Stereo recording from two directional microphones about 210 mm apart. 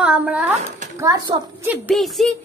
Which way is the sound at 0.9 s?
15° right (ahead or behind).